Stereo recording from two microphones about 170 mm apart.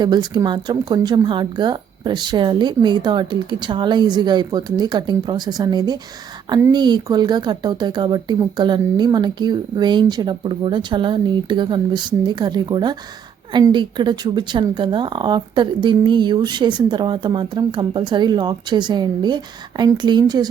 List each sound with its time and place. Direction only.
0.0 s speech: 25° right (ahead or behind)